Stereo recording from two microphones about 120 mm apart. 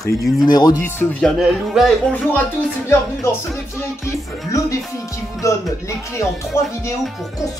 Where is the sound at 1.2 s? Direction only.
Centre (ahead or behind).